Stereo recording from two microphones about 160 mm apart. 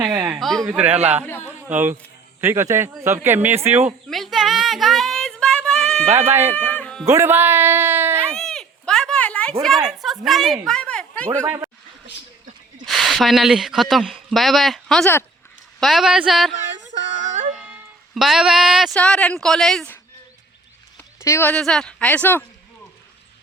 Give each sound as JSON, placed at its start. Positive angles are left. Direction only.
{"t": 0.0, "sound": "a woman's voice", "side_deg": -5}
{"t": 0.7, "sound": "speech", "side_deg": -10}
{"t": 4.1, "sound": "music", "side_deg": 0}
{"t": 6.1, "sound": "speech", "side_deg": -15}
{"t": 6.6, "sound": "music", "side_deg": 5}
{"t": 7.0, "sound": "speech", "side_deg": -15}
{"t": 8.2, "sound": "a sound", "side_deg": 5}
{"t": 9.6, "sound": "speech", "side_deg": 0}
{"t": 11.4, "sound": "speech", "side_deg": -15}
{"t": 12.8, "sound": "a woman's voice", "side_deg": 0}
{"t": 16.6, "sound": "a sound", "side_deg": -50}
{"t": 17.6, "sound": "speech", "side_deg": -5}
{"t": 21.2, "sound": "speech", "side_deg": 15}
{"t": 21.5, "sound": "speech", "side_deg": 5}